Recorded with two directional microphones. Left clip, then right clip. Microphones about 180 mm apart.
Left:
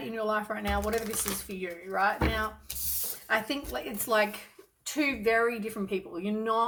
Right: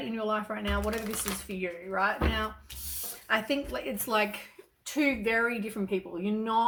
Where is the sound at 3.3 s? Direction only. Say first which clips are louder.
Right 1 dB; 10° right (ahead or behind).